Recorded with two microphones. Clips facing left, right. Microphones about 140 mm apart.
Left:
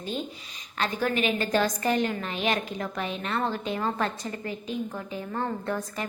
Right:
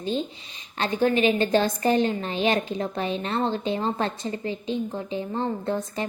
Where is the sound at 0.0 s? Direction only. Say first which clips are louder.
Right 5 dB; 30° right (ahead or behind).